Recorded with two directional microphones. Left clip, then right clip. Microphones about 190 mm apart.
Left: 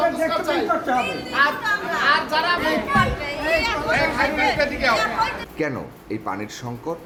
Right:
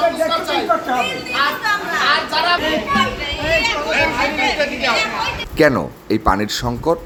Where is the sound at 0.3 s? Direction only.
15° right (ahead or behind).